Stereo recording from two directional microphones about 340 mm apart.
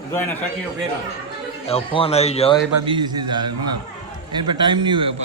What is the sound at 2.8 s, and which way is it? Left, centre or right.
A man's voice, centre.